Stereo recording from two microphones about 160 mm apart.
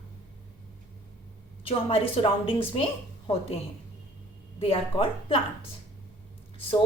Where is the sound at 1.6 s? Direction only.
35° left (ahead or behind).